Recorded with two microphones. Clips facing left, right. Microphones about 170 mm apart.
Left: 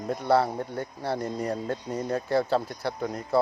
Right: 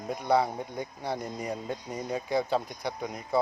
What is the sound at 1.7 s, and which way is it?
Music, 10° right (ahead or behind).